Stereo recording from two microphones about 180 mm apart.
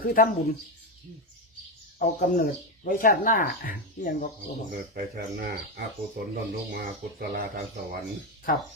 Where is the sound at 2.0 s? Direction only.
55° left (ahead or behind).